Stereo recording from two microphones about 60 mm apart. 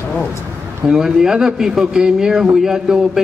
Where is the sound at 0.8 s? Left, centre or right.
Centre.